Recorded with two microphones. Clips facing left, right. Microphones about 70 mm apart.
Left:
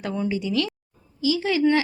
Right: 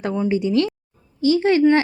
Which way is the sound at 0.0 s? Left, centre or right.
Right.